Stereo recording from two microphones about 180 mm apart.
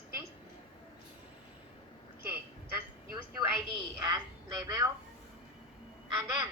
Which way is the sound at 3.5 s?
20° right (ahead or behind).